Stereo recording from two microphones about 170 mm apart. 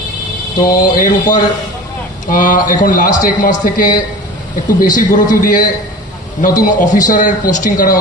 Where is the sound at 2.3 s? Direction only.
50° left (ahead or behind).